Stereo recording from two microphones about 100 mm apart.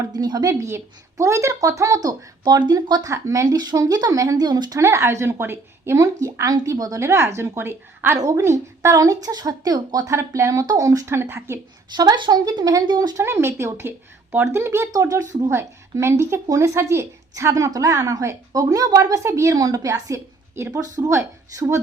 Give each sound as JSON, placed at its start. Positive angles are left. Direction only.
{"t": 0.2, "sound": "a woman's voice", "side_deg": -40}
{"t": 0.6, "sound": "a woman's voice", "side_deg": -30}
{"t": 4.8, "sound": "a woman's voice", "side_deg": -30}
{"t": 11.9, "sound": "speech", "side_deg": -50}
{"t": 13.2, "sound": "a woman's voice", "side_deg": -25}